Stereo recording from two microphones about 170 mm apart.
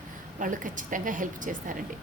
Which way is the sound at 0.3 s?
50° right (ahead or behind).